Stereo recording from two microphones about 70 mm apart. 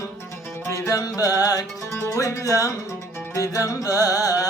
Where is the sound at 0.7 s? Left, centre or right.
Left.